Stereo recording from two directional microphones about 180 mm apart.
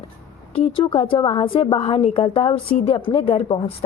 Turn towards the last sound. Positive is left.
turn(degrees=30)  # may be behind; listen again after turning